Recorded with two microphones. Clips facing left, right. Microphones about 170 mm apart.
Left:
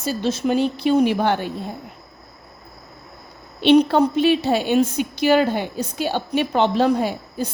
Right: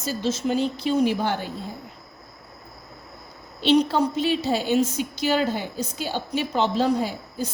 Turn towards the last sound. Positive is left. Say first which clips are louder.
# left 4 dB
turn(degrees=65)  # may be behind; listen again after turning